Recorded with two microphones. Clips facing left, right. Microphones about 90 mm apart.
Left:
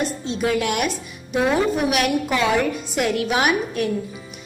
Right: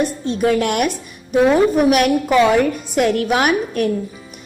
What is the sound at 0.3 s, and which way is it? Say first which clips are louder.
Speech: right 5 dB; 50° right (ahead or behind).